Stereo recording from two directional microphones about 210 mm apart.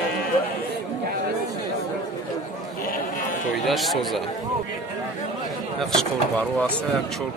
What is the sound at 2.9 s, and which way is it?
Sheep, 40° left (ahead or behind).